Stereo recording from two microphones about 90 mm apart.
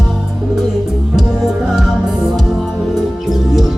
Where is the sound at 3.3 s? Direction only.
Centre (ahead or behind).